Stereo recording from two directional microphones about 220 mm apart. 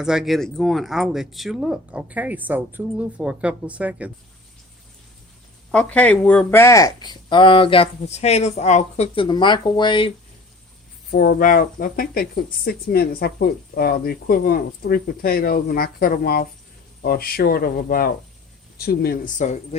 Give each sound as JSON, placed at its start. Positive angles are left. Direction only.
{"t": 0.0, "sound": "speech", "side_deg": 0}
{"t": 5.7, "sound": "speech", "side_deg": 5}
{"t": 11.1, "sound": "speech", "side_deg": 40}